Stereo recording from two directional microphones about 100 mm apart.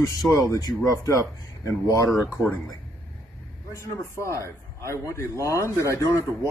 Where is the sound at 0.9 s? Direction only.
35° left (ahead or behind).